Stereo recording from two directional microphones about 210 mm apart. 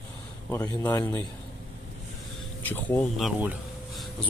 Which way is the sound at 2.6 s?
10° left (ahead or behind).